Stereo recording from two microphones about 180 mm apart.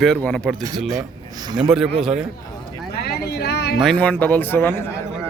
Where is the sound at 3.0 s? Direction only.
65° left (ahead or behind).